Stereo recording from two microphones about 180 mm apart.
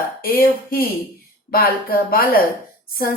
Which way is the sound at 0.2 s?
55° left (ahead or behind).